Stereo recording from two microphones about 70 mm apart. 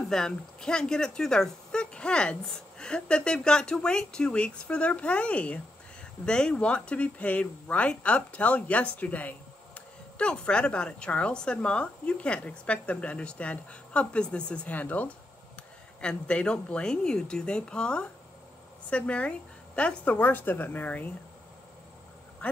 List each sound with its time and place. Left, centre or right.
0.1 s speech: centre; by 21.1 s left
22.4 s quack: centre